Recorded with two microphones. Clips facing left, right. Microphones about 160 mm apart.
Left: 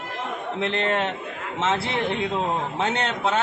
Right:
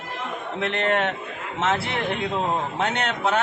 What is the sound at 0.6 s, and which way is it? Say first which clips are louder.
A man's voice: right 1 dB; 30° left (ahead or behind).